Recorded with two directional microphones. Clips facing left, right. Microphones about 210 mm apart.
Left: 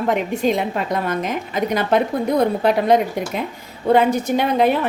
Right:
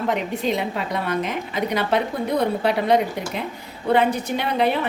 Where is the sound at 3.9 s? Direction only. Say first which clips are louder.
Left 4 dB; 45° left (ahead or behind).